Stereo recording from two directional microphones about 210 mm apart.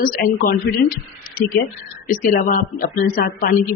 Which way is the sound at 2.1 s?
40° left (ahead or behind).